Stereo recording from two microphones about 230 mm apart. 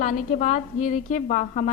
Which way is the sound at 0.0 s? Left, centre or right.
Left.